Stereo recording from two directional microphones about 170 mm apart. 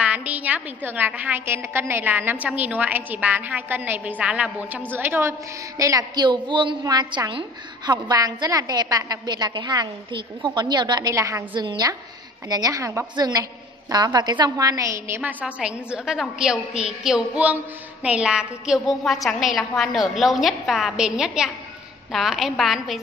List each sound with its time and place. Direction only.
0.0 s a woman's voice: 5° right (ahead or behind)